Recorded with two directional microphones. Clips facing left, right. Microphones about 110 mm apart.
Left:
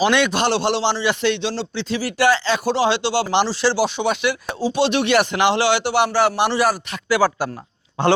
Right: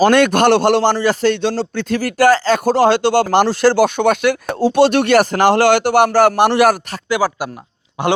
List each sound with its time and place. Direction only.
0.0 s a man's voice: 45° right (ahead or behind)
7.1 s speech: 15° right (ahead or behind)